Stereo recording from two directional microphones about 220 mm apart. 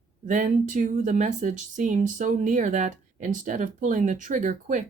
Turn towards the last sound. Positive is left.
turn(degrees=-35)  # may be behind; listen again after turning